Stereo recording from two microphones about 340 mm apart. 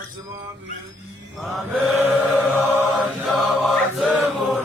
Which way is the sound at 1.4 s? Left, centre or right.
Centre.